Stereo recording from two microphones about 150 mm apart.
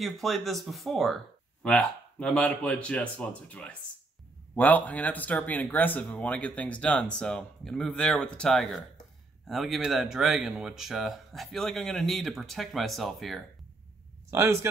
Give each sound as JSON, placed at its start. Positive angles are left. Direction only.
{"t": 0.0, "sound": "speech", "side_deg": 0}
{"t": 14.3, "sound": "a man's voice", "side_deg": -15}